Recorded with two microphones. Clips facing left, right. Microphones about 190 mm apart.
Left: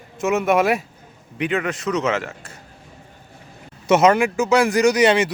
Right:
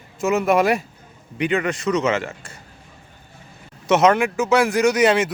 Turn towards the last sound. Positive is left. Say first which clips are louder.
# left 1 dB
turn(degrees=0)  # may be behind; listen again after turning